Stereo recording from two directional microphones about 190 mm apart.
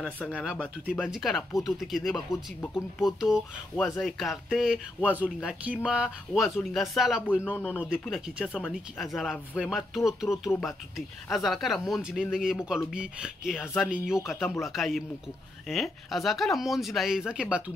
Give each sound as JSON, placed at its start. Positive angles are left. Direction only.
{"t": 0.0, "sound": "speech", "side_deg": 5}
{"t": 3.2, "sound": "speech", "side_deg": 0}
{"t": 7.5, "sound": "speech", "side_deg": 10}
{"t": 7.9, "sound": "speech", "side_deg": -5}